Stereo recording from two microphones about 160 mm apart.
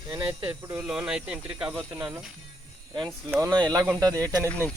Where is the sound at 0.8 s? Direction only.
5° right (ahead or behind).